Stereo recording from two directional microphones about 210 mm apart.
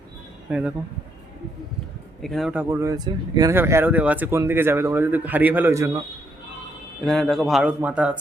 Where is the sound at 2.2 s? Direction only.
Centre (ahead or behind).